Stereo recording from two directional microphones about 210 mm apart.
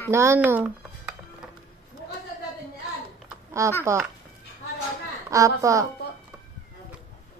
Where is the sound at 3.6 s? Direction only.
15° right (ahead or behind).